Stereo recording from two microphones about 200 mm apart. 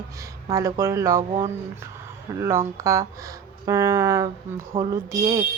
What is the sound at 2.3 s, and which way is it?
Speech, 20° right (ahead or behind).